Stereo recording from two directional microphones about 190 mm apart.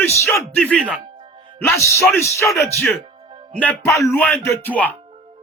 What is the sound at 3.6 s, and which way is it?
Speech, 10° left (ahead or behind).